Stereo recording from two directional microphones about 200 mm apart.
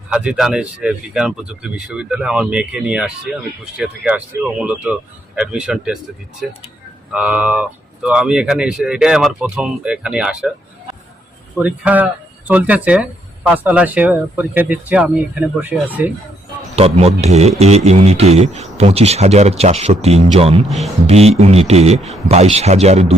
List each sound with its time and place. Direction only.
0.1 s speech: 5° right (ahead or behind)
7.1 s speech: 5° right (ahead or behind)
11.5 s speech: 5° right (ahead or behind)
16.7 s a man's voice: 30° right (ahead or behind)
20.7 s speech: centre (ahead or behind)
21.1 s a man's voice: 30° right (ahead or behind)